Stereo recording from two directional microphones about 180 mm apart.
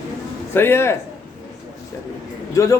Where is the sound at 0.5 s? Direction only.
15° left (ahead or behind).